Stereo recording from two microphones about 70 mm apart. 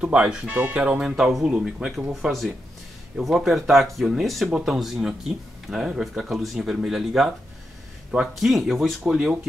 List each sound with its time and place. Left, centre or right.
0.0 s speech: centre
1.0 s speech: centre
3.2 s speech: centre
9.0 s speech: centre